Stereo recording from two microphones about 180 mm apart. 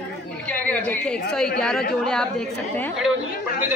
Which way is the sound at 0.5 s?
10° left (ahead or behind).